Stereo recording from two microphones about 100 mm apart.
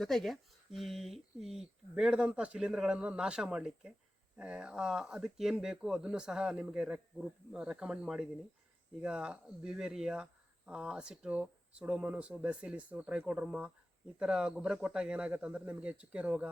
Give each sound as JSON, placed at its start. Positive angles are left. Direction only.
{"t": 0.0, "sound": "speech", "side_deg": 5}